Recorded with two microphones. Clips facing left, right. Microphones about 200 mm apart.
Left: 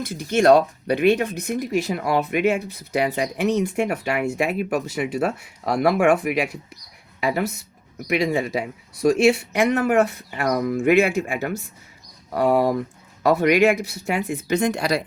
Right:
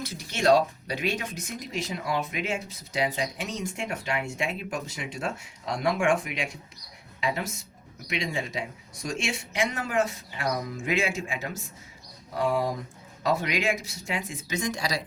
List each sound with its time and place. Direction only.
0.0 s speech: 50° left (ahead or behind)